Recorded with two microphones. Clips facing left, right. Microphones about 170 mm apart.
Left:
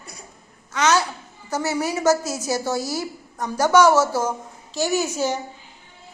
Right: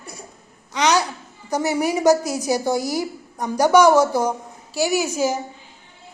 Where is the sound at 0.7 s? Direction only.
15° right (ahead or behind).